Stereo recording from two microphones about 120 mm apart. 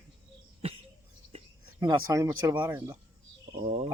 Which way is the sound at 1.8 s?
30° right (ahead or behind).